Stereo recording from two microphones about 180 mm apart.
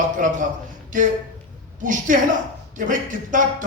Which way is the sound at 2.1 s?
45° right (ahead or behind).